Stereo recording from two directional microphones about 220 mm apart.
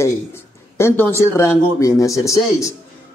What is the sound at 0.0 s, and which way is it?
A man's voice, 10° left (ahead or behind).